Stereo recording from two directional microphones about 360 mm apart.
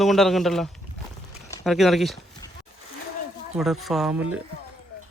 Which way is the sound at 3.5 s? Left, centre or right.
Centre.